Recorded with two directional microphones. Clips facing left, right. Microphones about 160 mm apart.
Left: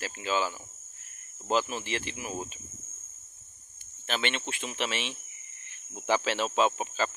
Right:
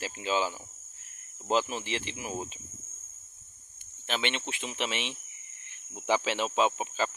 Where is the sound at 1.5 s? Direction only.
20° right (ahead or behind).